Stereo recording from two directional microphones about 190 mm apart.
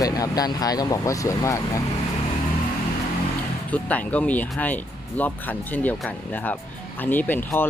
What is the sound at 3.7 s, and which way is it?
Speech, 10° left (ahead or behind).